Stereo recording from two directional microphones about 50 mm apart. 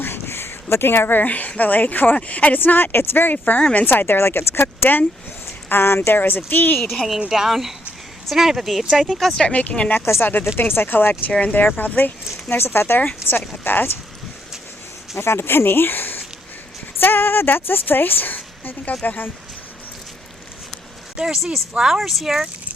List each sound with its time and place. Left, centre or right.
0.0 s speech: left
2.6 s a woman's voice: left
3.6 s speech: left
3.8 s a woman's voice: left
6.1 s a woman's voice: left
6.7 s speech: centre
7.3 s speech: centre
9.4 s speech: left
10.1 s a woman's voice: left
11.3 s speech: left
11.6 s a woman's voice: left
13.7 s a woman's voice: left
15.1 s a woman's voice: left
21.2 s speech: centre